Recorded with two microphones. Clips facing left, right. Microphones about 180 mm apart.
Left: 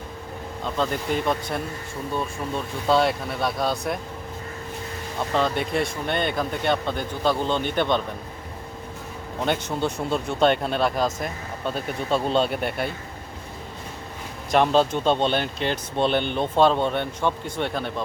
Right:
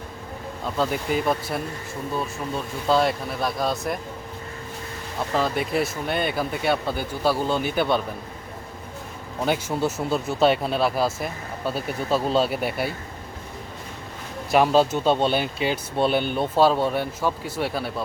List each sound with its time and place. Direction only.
0.8 s speech: 5° right (ahead or behind)
2.8 s speech: centre (ahead or behind)
5.3 s speech: 5° right (ahead or behind)
9.5 s speech: 5° right (ahead or behind)
14.5 s speech: 5° right (ahead or behind)